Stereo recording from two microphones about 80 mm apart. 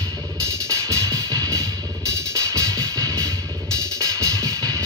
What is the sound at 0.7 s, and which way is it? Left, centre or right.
Music, right.